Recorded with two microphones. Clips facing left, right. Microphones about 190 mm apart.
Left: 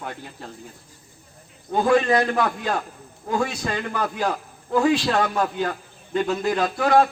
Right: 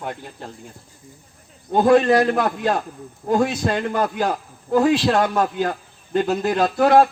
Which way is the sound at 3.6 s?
45° right (ahead or behind).